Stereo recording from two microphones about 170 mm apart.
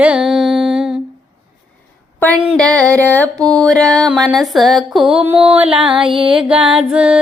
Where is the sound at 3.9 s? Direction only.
Centre (ahead or behind).